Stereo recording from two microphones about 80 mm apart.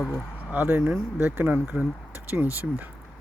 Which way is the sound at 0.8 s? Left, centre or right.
Centre.